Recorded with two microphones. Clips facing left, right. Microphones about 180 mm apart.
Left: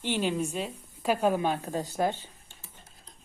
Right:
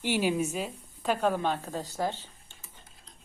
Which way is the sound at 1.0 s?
10° left (ahead or behind).